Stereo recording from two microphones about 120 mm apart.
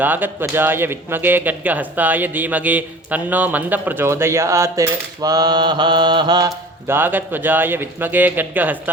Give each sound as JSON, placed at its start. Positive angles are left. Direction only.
{"t": 0.0, "sound": "speech", "side_deg": -15}
{"t": 6.8, "sound": "speech", "side_deg": -20}